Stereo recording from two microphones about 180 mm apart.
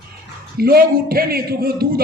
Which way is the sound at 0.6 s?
55° right (ahead or behind).